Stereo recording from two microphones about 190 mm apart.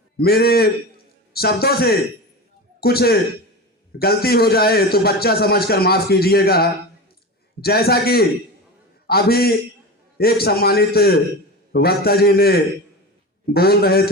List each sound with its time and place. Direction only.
0.2 s a man's voice: 55° left (ahead or behind)